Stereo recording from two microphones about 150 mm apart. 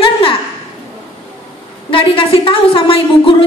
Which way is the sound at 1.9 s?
35° left (ahead or behind).